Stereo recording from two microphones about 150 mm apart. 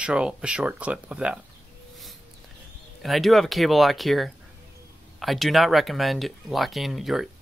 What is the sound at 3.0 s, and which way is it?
Speech, centre (ahead or behind).